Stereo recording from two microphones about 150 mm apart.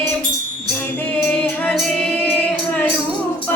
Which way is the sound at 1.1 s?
10° left (ahead or behind).